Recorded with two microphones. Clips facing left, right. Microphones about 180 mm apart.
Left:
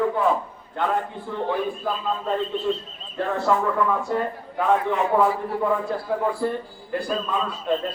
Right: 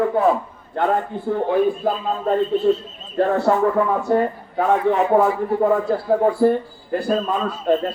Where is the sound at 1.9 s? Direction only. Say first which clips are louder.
Right 5 dB; 45° right (ahead or behind).